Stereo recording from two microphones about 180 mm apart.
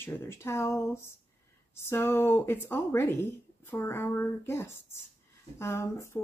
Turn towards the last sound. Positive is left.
turn(degrees=15)  # may be behind; listen again after turning